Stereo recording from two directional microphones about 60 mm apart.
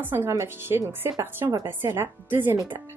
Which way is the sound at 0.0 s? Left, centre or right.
Right.